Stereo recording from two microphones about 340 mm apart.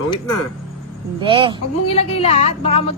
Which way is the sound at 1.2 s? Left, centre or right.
Centre.